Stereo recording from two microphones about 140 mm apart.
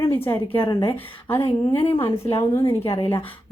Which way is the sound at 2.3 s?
20° left (ahead or behind).